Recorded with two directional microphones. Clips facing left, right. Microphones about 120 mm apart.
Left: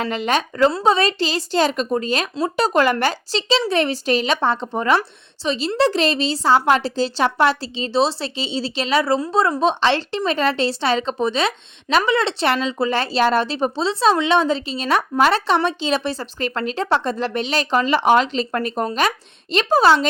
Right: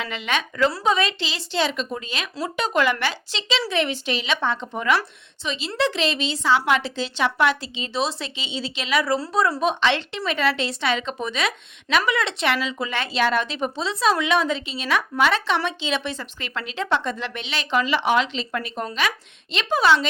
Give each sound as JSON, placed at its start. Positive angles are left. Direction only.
{"t": 0.0, "sound": "a woman's voice", "side_deg": 40}